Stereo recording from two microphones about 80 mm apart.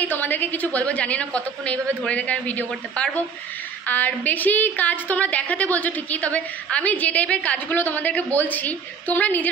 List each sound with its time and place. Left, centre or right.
0.0 s a woman's voice: left